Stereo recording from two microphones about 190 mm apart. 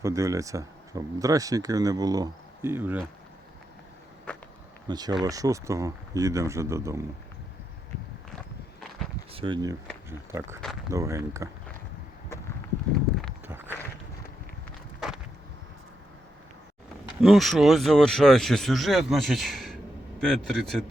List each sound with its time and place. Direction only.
0.0 s speech: 15° right (ahead or behind)
4.9 s speech: 20° right (ahead or behind)
9.3 s speech: 25° right (ahead or behind)
13.1 s walk: centre (ahead or behind)
17.2 s speech: centre (ahead or behind)